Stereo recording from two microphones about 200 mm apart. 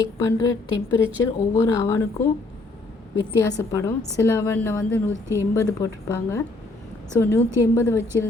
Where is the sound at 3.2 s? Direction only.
15° left (ahead or behind).